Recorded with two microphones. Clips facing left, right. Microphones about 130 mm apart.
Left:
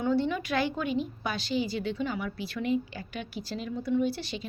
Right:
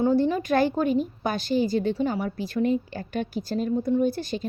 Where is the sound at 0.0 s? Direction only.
40° right (ahead or behind).